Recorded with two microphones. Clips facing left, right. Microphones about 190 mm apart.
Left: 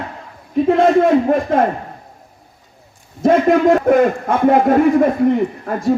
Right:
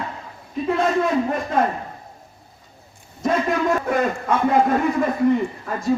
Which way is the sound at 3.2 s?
55° left (ahead or behind).